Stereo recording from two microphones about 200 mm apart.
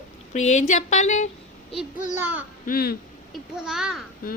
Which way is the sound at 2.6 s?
50° left (ahead or behind).